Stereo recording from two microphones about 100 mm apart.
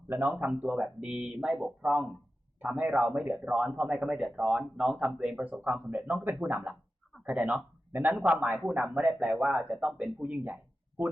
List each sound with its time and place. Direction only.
0.1 s speech: 20° right (ahead or behind)